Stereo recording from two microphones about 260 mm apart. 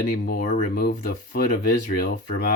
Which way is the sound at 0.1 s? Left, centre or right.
Left.